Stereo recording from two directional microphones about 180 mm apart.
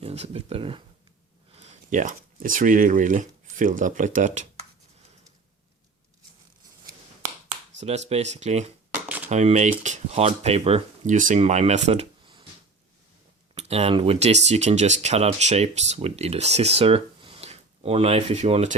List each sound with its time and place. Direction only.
0.0 s speech: 35° right (ahead or behind)
7.8 s speech: 35° right (ahead or behind)
9.0 s typewriter: 10° right (ahead or behind)
9.3 s speech: 40° right (ahead or behind)
13.6 s speech: 35° right (ahead or behind)